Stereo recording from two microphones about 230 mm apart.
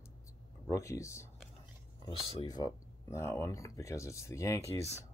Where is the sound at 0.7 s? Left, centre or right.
Centre.